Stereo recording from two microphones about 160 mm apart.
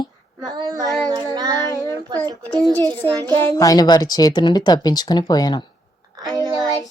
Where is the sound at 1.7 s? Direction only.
20° left (ahead or behind).